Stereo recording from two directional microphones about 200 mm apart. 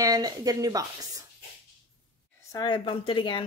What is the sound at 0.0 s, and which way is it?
Speech, 20° right (ahead or behind).